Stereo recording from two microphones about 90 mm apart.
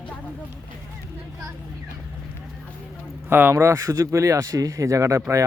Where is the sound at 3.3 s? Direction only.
25° right (ahead or behind).